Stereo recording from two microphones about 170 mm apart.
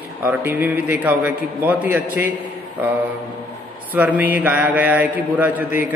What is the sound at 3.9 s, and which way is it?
A man's voice, 10° right (ahead or behind).